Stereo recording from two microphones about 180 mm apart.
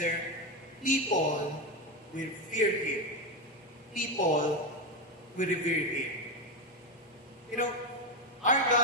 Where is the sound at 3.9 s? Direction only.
45° left (ahead or behind).